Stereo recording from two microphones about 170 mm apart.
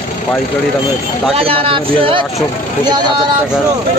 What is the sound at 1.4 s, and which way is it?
Speech, 30° right (ahead or behind).